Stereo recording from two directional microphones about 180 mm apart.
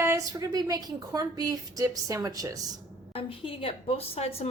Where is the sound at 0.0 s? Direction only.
15° right (ahead or behind).